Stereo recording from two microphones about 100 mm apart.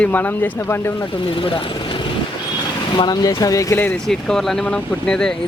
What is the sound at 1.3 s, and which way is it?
Speech, 60° left (ahead or behind).